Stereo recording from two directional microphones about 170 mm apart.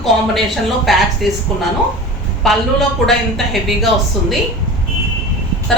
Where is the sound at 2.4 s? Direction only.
Centre (ahead or behind).